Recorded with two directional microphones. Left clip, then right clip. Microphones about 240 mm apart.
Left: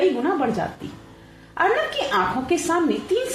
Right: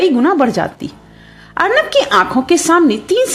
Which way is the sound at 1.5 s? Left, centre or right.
Right.